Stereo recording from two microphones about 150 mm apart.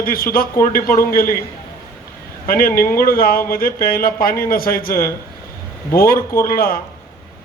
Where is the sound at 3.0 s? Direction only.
75° left (ahead or behind).